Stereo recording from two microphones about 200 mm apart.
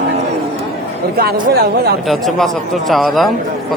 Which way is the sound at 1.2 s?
50° right (ahead or behind).